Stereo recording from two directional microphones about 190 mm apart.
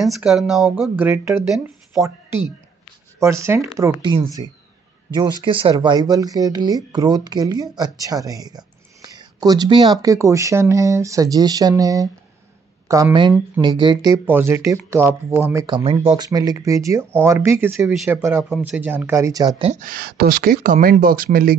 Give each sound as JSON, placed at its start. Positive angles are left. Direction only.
{"t": 0.0, "sound": "speech", "side_deg": 0}
{"t": 15.6, "sound": "speech", "side_deg": -25}
{"t": 16.3, "sound": "speech", "side_deg": -20}
{"t": 19.6, "sound": "speech", "side_deg": -40}